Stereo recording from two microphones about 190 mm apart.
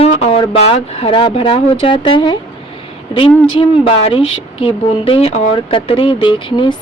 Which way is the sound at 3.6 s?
30° left (ahead or behind).